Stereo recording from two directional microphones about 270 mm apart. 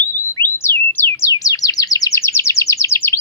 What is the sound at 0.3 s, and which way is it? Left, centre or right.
Bird, centre.